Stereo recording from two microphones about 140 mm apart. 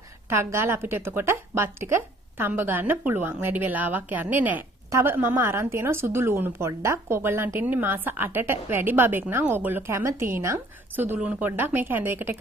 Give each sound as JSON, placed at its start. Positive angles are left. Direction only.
{"t": 0.3, "sound": "a woman's voice", "side_deg": -20}